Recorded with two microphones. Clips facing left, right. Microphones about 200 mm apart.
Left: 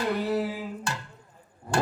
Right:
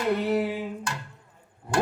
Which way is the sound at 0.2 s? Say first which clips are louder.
Right 2 dB; 25° right (ahead or behind).